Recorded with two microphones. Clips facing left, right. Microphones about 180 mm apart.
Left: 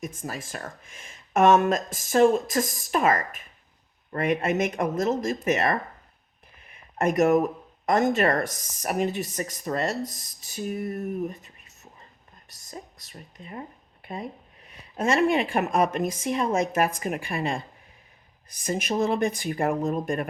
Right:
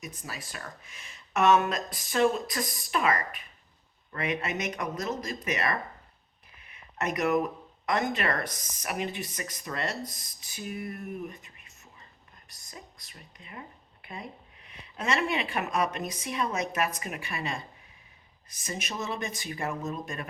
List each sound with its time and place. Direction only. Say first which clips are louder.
0.0 s speech: left 7 dB; 50° left (ahead or behind)